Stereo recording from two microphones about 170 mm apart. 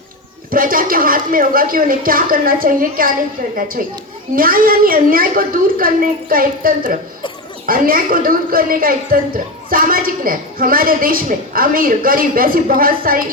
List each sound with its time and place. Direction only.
0.5 s a woman's voice: 55° right (ahead or behind)